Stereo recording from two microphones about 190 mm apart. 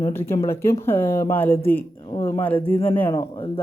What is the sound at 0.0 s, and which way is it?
Speech, 15° left (ahead or behind).